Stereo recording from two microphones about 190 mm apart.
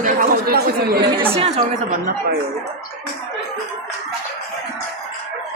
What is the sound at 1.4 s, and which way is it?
Speech, 35° right (ahead or behind).